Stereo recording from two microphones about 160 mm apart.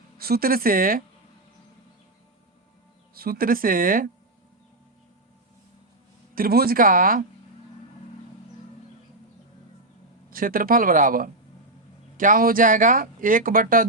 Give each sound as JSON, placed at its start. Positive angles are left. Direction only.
{"t": 0.2, "sound": "speech", "side_deg": -70}
{"t": 3.2, "sound": "speech", "side_deg": -65}
{"t": 6.3, "sound": "speech", "side_deg": -70}
{"t": 10.2, "sound": "speech", "side_deg": -60}